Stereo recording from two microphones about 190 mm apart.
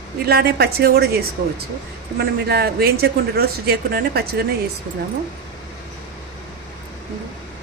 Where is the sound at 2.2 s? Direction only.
55° right (ahead or behind).